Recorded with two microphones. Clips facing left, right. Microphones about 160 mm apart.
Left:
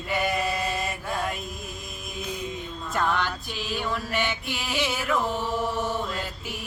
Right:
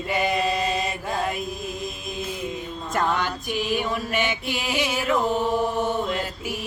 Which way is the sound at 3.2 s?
15° right (ahead or behind).